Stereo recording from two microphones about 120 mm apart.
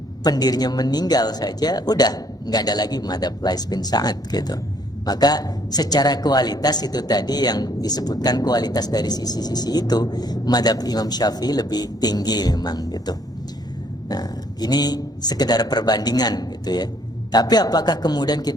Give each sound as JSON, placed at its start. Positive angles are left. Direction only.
{"t": 0.2, "sound": "a woman's voice", "side_deg": 35}